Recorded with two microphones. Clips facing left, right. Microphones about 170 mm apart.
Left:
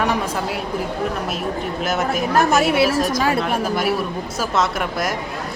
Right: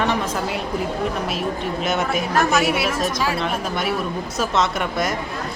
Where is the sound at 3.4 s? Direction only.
5° left (ahead or behind).